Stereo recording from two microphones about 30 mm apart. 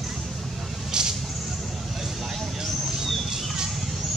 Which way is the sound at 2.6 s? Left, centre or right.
Centre.